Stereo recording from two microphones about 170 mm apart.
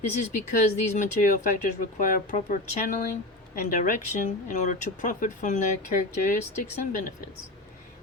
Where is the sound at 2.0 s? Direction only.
50° left (ahead or behind).